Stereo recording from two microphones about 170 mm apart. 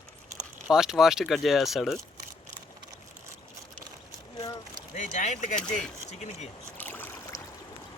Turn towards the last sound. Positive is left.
turn(degrees=10)  # may be behind; listen again after turning